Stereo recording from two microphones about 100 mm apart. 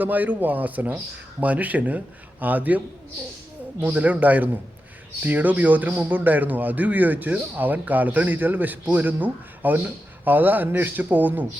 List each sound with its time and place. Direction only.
0.0 s a man's voice: 15° right (ahead or behind)